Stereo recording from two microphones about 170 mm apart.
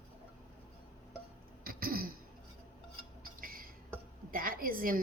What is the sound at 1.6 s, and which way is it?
Throat clearing, 60° right (ahead or behind).